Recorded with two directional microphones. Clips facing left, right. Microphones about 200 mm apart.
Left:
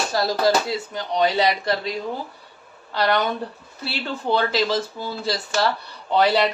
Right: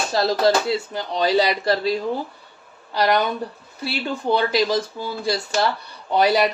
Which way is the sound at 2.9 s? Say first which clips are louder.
Right 2 dB; 15° right (ahead or behind).